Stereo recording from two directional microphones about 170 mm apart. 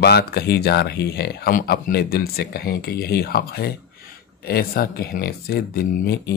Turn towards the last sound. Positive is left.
turn(degrees=70)  # may be behind; listen again after turning